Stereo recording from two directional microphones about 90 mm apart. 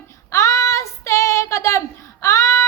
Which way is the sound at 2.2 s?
35° left (ahead or behind).